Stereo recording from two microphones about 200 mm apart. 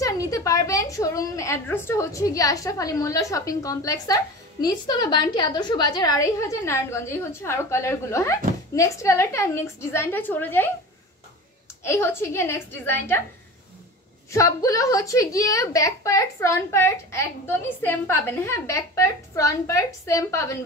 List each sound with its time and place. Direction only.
0.0 s a woman's voice: 15° left (ahead or behind)
11.8 s a woman's voice: 15° left (ahead or behind)
14.3 s a woman's voice: 15° left (ahead or behind)